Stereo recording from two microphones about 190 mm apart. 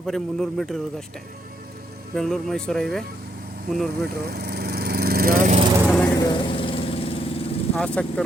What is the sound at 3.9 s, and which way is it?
Lawn mower, 55° right (ahead or behind).